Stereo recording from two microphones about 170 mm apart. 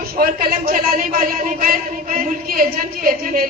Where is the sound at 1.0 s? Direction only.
50° right (ahead or behind).